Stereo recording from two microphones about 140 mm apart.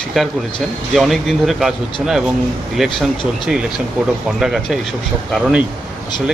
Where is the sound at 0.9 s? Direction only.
Centre (ahead or behind).